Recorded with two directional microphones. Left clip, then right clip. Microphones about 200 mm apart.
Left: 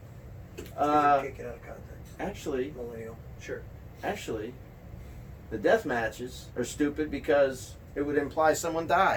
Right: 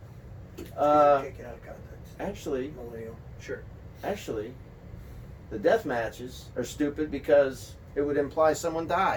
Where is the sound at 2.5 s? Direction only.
20° left (ahead or behind).